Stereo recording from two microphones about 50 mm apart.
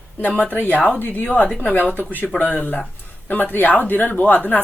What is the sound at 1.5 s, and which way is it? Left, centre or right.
Speech, left.